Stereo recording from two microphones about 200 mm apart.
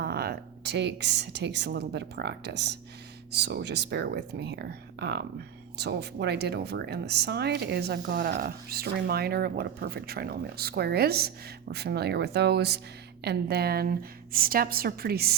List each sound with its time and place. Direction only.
0.0 s a woman's voice: 50° right (ahead or behind)